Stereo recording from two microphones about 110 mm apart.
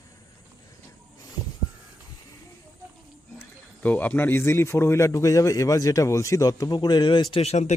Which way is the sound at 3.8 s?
15° left (ahead or behind).